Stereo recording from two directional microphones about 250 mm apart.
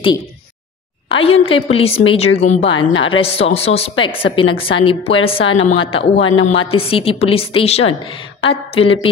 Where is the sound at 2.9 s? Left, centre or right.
Left.